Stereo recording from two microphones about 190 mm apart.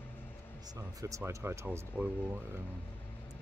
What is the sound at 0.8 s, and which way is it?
Speech, 15° right (ahead or behind).